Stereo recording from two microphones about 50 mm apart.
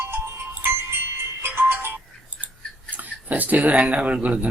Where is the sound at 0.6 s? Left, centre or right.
Right.